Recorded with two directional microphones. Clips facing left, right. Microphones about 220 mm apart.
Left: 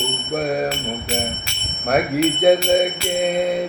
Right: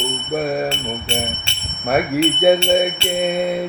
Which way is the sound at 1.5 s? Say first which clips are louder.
Even; 30° right (ahead or behind).